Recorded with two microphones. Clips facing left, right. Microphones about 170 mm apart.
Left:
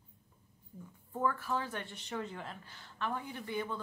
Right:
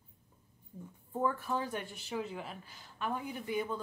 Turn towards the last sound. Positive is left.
turn(degrees=-15)  # may be behind; listen again after turning